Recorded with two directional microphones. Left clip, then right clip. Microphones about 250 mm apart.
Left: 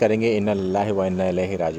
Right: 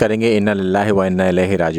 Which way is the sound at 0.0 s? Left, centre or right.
Right.